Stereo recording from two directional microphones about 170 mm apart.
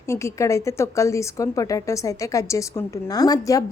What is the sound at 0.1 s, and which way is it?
A woman's voice, 15° left (ahead or behind).